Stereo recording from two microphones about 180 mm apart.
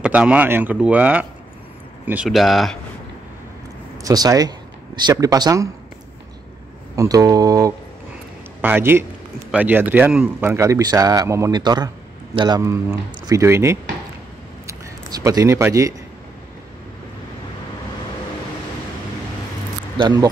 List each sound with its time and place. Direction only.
0.0 s speech: 5° right (ahead or behind)
4.0 s speech: 20° right (ahead or behind)
7.0 s a man's voice: 20° right (ahead or behind)
20.0 s speech: 25° right (ahead or behind)